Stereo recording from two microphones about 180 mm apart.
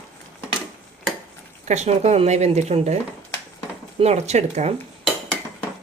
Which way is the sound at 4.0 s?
35° right (ahead or behind).